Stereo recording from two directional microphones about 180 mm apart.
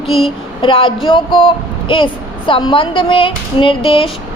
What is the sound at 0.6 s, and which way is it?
A woman's voice, 30° left (ahead or behind).